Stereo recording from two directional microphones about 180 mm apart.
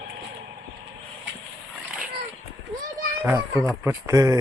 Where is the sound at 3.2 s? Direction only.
10° right (ahead or behind).